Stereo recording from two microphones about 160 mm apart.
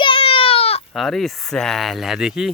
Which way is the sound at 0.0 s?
35° left (ahead or behind).